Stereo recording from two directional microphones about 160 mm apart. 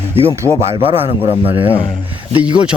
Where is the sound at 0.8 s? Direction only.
35° right (ahead or behind).